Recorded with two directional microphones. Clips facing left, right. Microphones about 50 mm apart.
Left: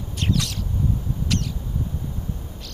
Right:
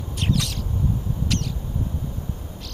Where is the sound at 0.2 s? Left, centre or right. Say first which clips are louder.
Even; centre.